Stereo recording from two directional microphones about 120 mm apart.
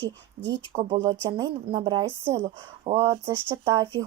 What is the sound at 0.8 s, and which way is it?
Speech, 40° right (ahead or behind).